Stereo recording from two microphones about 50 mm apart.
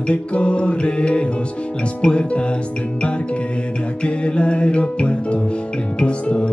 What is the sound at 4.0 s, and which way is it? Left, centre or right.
Music, left.